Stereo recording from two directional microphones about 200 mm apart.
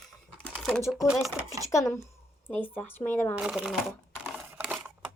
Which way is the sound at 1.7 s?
15° left (ahead or behind).